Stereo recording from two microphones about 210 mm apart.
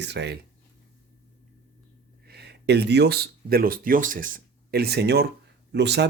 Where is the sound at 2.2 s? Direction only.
50° right (ahead or behind).